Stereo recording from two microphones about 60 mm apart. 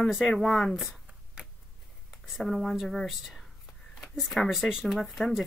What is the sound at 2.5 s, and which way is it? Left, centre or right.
Speech, centre.